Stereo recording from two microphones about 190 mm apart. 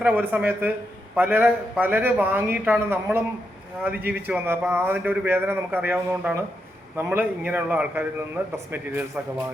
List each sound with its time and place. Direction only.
0.0 s a man's voice: 10° right (ahead or behind)